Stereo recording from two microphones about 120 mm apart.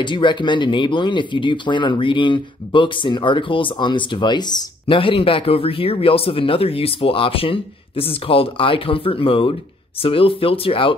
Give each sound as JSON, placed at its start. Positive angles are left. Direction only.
{"t": 0.0, "sound": "speech", "side_deg": 40}